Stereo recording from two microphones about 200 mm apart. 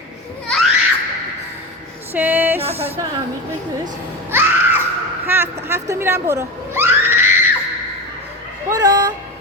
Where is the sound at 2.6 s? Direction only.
30° right (ahead or behind).